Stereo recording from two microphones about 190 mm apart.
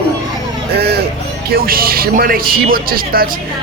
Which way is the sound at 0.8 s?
55° right (ahead or behind).